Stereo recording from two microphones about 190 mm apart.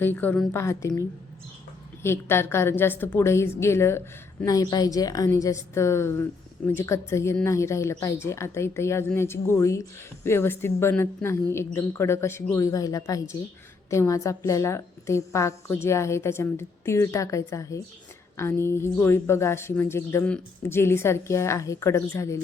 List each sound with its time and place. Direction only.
0.0 s speech: 10° left (ahead or behind)
2.0 s speech: 10° left (ahead or behind)